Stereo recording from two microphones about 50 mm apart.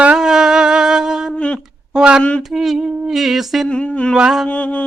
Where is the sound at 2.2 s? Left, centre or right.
Left.